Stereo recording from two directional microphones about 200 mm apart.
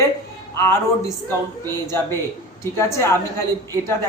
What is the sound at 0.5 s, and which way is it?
Speech, 15° left (ahead or behind).